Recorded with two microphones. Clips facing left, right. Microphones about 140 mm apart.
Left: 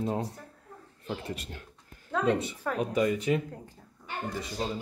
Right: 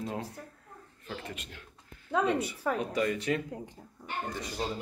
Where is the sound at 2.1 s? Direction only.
10° right (ahead or behind).